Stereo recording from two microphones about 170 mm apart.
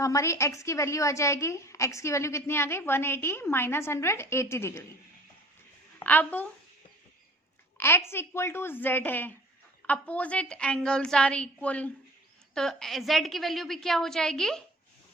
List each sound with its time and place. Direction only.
0.0 s a woman's voice: 20° left (ahead or behind)
6.0 s a woman's voice: 10° left (ahead or behind)
7.8 s a woman's voice: 15° left (ahead or behind)